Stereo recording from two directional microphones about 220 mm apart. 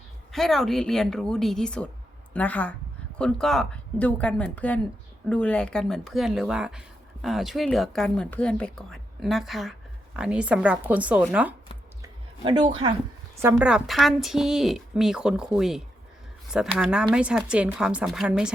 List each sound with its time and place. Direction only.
0.3 s a woman's voice: centre (ahead or behind)
12.0 s a sound: 20° right (ahead or behind)
13.4 s speech: 10° right (ahead or behind)